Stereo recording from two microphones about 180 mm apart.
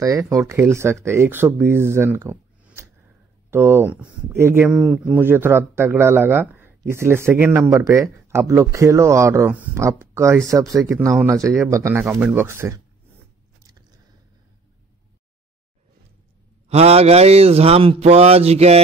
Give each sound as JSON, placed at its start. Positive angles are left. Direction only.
{"t": 0.0, "sound": "speech", "side_deg": -20}
{"t": 10.9, "sound": "speech", "side_deg": -5}
{"t": 11.2, "sound": "speech", "side_deg": -15}
{"t": 16.6, "sound": "speech", "side_deg": -35}